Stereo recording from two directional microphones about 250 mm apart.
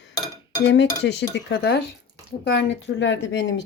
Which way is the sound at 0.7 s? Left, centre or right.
Left.